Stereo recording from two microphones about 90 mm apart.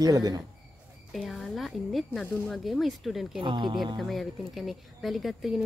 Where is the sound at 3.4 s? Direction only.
65° right (ahead or behind).